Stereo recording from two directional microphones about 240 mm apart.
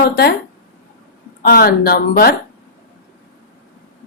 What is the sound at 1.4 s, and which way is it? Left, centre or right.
Speech, left.